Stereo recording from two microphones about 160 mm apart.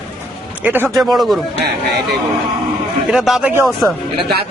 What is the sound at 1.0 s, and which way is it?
Speech, centre (ahead or behind).